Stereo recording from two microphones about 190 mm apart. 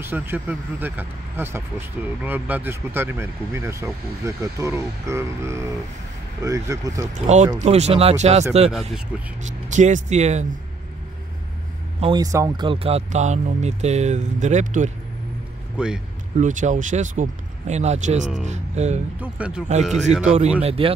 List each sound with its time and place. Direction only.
0.0 s speech: 10° right (ahead or behind)
7.2 s speech: 35° right (ahead or behind)
12.0 s speech: 20° right (ahead or behind); by 14.9 s 40° right (ahead or behind)
15.8 s speech: 5° right (ahead or behind)
16.3 s speech: 40° right (ahead or behind)
19.1 s speech: 10° right (ahead or behind)
20.6 s speech: 30° right (ahead or behind)